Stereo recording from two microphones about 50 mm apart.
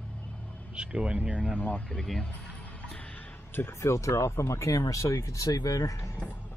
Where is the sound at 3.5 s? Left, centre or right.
Left.